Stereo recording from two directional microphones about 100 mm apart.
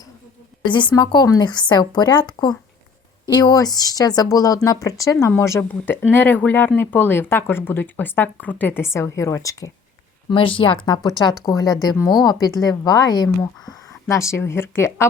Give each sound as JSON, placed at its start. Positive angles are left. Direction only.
{"t": 0.6, "sound": "a woman's voice", "side_deg": 55}
{"t": 10.2, "sound": "a woman's voice", "side_deg": 60}
{"t": 13.7, "sound": "speech", "side_deg": 30}